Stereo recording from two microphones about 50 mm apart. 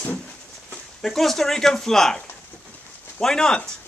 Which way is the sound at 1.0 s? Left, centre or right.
Centre.